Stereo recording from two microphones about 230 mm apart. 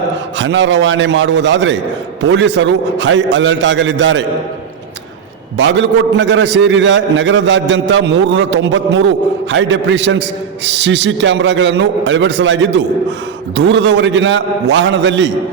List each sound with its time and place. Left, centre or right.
0.3 s a man's voice: right
5.5 s a man's voice: right